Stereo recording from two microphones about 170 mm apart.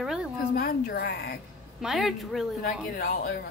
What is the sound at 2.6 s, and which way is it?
Speech, 55° left (ahead or behind).